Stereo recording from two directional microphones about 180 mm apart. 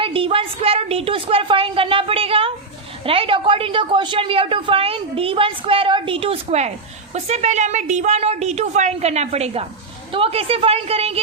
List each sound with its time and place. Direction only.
0.0 s a woman's voice: 30° right (ahead or behind)